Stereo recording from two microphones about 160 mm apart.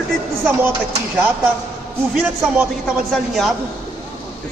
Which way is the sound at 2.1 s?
5° right (ahead or behind).